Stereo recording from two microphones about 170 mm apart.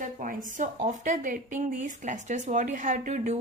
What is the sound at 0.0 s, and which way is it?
Speech, 50° right (ahead or behind).